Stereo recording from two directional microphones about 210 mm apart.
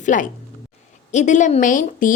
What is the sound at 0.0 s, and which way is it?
A woman's voice, 40° left (ahead or behind).